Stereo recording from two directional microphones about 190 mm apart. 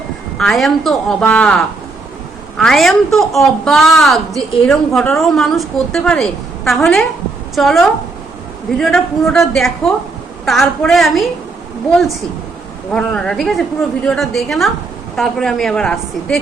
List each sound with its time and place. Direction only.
0.3 s a woman's voice: centre (ahead or behind)
12.9 s a woman's voice: 5° left (ahead or behind)